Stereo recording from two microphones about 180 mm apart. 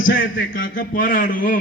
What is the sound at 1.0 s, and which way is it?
Speech, 50° left (ahead or behind).